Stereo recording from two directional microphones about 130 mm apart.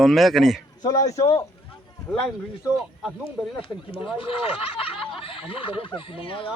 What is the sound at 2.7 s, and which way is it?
Speech, centre (ahead or behind).